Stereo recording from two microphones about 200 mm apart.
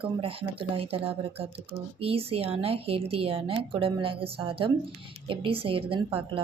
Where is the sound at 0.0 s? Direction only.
25° right (ahead or behind).